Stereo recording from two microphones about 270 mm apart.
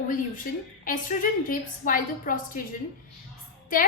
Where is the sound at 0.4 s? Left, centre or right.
Left.